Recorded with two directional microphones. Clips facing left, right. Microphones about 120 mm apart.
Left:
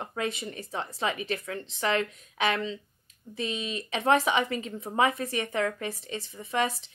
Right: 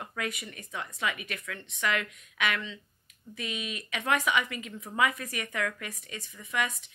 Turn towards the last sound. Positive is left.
turn(degrees=30)  # may be behind; listen again after turning